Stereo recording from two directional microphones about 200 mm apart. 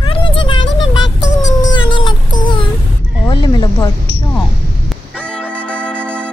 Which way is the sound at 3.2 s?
20° left (ahead or behind).